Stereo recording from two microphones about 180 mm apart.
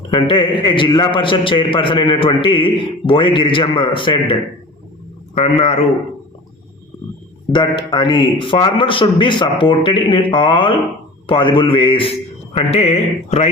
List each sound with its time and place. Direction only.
0.1 s a man's voice: 30° left (ahead or behind)
5.3 s mantra: 35° left (ahead or behind)
7.5 s a man's voice: 25° left (ahead or behind)
12.5 s mantra: 35° left (ahead or behind)